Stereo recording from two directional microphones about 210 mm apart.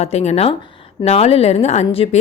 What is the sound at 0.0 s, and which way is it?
Speech, 30° left (ahead or behind).